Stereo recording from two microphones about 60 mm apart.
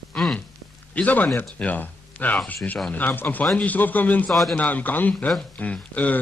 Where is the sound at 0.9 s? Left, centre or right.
Left.